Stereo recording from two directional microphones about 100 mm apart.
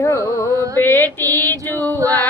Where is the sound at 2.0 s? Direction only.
35° right (ahead or behind).